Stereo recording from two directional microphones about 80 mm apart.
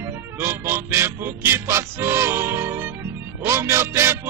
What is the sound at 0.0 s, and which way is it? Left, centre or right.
Music, right.